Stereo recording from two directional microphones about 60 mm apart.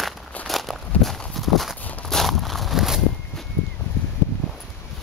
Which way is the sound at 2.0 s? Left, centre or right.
Centre.